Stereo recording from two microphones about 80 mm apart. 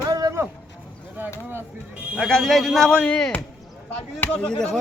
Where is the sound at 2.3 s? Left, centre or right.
Centre.